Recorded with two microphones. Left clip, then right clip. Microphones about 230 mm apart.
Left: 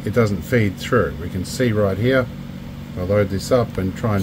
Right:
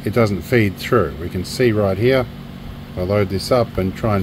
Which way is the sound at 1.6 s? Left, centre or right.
Right.